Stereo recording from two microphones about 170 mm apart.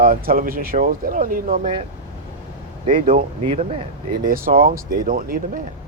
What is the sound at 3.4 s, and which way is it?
Speech, 35° right (ahead or behind).